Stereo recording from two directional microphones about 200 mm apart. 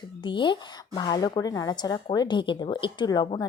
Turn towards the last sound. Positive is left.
turn(degrees=20)  # may be behind; listen again after turning